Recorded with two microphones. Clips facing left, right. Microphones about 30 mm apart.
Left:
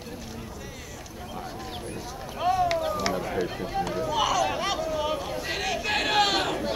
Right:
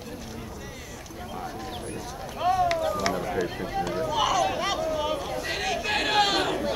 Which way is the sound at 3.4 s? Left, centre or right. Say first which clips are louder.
Even; centre.